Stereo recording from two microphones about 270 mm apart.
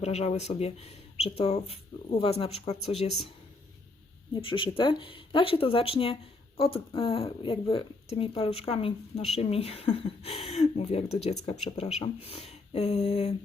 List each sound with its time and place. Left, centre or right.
0.0 s a woman's voice: left
4.4 s a woman's voice: centre